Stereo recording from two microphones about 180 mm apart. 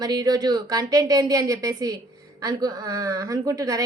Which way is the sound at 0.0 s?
20° right (ahead or behind).